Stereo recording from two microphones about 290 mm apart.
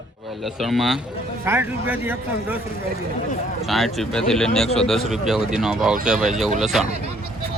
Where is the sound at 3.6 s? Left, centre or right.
Centre.